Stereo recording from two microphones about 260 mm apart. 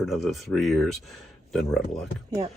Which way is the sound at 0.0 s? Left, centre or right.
Centre.